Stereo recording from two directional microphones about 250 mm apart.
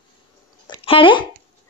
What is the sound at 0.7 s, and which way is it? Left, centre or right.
Speech, left.